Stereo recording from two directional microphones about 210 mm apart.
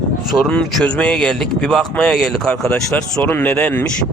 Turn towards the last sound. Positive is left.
turn(degrees=5)  # may be behind; listen again after turning